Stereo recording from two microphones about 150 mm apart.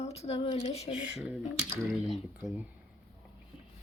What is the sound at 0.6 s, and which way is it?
Speech, 45° left (ahead or behind).